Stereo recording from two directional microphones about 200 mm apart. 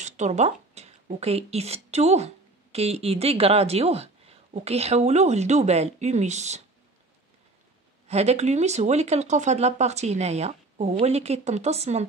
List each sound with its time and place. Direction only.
0.0 s speech: 35° right (ahead or behind)
8.1 s speech: 35° right (ahead or behind)